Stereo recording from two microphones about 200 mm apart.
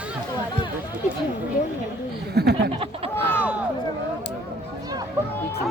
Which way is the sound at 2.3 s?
55° right (ahead or behind).